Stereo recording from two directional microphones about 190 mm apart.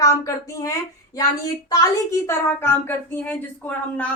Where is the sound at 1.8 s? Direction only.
15° left (ahead or behind).